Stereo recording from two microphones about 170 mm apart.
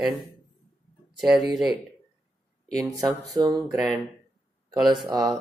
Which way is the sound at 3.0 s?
Centre (ahead or behind).